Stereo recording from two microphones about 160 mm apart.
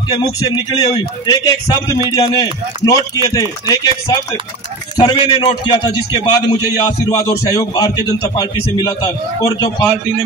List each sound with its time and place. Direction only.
0.1 s a man's voice: 25° left (ahead or behind)